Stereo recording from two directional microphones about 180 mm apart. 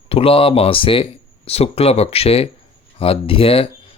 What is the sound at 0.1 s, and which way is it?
Speech, 30° left (ahead or behind).